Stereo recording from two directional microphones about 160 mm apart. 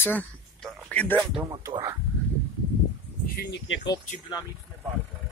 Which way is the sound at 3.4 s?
90° left.